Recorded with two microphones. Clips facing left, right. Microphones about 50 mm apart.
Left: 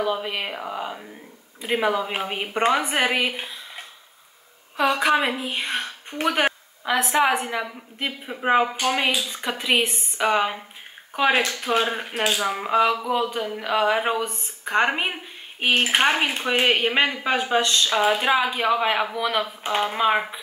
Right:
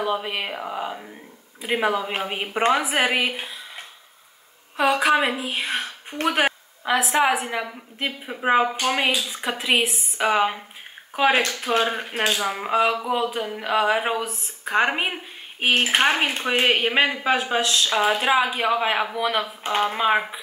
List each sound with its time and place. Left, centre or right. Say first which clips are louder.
0.0 s speech: even; centre